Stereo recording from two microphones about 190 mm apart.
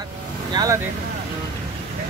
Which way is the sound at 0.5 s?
20° right (ahead or behind).